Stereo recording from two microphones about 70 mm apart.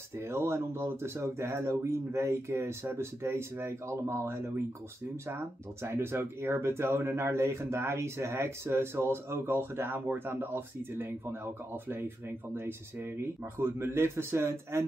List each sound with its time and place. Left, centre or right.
0.2 s speech: right